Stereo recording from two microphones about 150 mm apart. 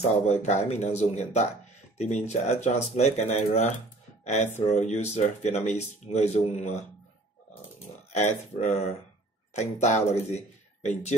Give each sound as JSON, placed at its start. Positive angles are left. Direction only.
{"t": 0.3, "sound": "speech", "side_deg": 50}
{"t": 8.1, "sound": "speech", "side_deg": 50}